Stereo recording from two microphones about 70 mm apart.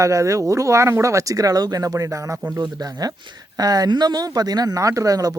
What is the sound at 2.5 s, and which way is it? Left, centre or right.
Speech, right.